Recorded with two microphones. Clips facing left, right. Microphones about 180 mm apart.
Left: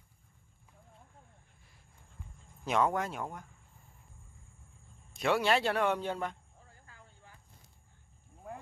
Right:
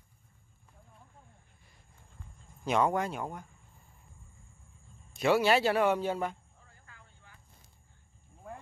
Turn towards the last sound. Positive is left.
turn(degrees=35)  # may be behind; listen again after turning